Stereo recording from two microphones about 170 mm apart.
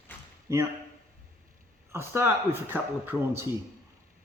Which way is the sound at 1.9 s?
15° right (ahead or behind).